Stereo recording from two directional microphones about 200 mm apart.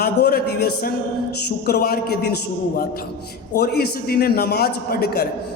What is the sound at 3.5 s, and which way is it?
A man's voice, 55° left (ahead or behind).